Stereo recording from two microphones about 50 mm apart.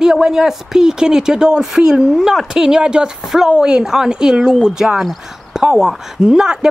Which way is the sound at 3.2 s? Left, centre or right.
Centre.